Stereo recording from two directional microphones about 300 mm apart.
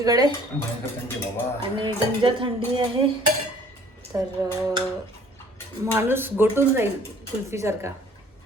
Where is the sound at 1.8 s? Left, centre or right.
Centre.